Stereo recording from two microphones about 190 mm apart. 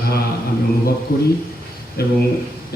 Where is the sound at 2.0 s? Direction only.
55° left (ahead or behind).